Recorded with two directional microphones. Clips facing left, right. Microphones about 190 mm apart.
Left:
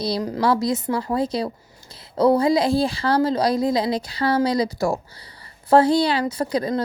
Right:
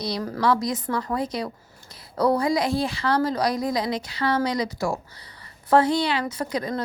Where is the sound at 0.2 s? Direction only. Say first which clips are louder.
Left 4 dB; 20° left (ahead or behind).